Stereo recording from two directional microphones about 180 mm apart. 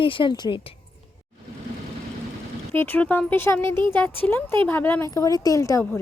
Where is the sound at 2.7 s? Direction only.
10° left (ahead or behind).